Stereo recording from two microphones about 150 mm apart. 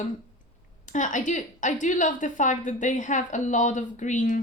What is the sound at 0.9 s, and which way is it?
A woman's voice, 55° left (ahead or behind).